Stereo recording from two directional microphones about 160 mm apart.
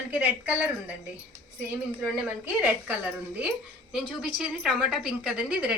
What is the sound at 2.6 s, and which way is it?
A woman's voice, 10° right (ahead or behind).